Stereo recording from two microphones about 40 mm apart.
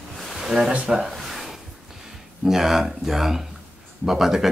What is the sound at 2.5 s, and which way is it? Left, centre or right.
Speech, centre.